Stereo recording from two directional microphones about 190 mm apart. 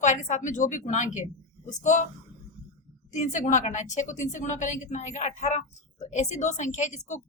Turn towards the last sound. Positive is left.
turn(degrees=40)  # may be behind; listen again after turning